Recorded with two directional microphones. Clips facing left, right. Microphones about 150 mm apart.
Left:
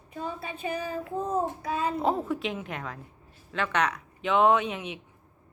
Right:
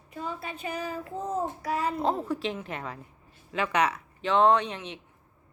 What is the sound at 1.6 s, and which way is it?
Child singing, 25° left (ahead or behind).